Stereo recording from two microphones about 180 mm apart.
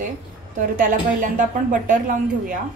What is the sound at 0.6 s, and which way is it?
A woman's voice, 50° right (ahead or behind).